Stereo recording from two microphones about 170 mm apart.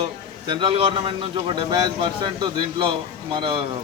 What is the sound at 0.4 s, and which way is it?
A man's voice, 30° right (ahead or behind).